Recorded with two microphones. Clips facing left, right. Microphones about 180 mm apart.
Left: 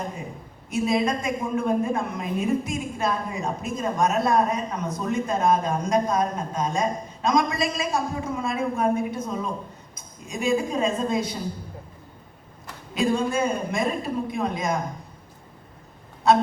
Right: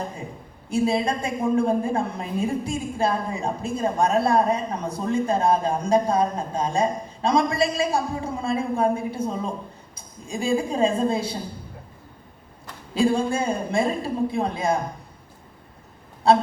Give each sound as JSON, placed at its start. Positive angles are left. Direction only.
{"t": 0.7, "sound": "a woman's voice", "side_deg": -30}
{"t": 12.9, "sound": "a woman's voice", "side_deg": -30}
{"t": 16.2, "sound": "a woman's voice", "side_deg": -30}